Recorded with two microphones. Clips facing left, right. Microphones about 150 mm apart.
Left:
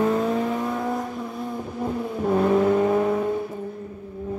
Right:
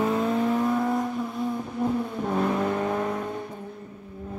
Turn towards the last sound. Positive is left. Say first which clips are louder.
# left 7 dB
turn(degrees=5)  # may be behind; listen again after turning